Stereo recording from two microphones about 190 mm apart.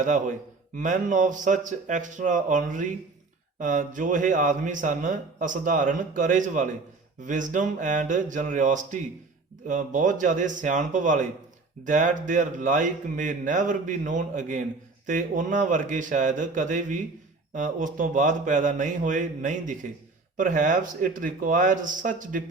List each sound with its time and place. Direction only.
0.0 s speech: 40° right (ahead or behind)